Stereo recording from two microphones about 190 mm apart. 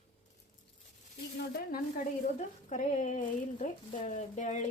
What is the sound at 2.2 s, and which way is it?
Speech, 40° left (ahead or behind).